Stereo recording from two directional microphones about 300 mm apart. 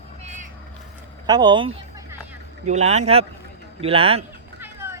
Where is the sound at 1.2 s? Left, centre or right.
Centre.